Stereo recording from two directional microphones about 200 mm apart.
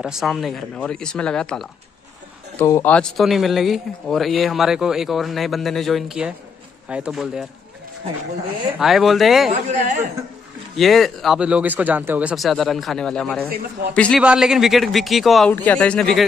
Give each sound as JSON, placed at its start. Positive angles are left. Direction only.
{"t": 0.0, "sound": "speech", "side_deg": 0}
{"t": 8.7, "sound": "speech", "side_deg": 0}
{"t": 9.5, "sound": "speech", "side_deg": -40}
{"t": 10.8, "sound": "speech", "side_deg": 0}